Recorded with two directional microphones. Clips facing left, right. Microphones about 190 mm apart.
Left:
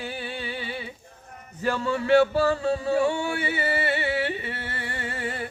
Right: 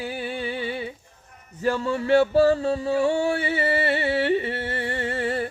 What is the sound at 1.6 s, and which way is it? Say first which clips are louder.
Music: right 2 dB; 35° right (ahead or behind).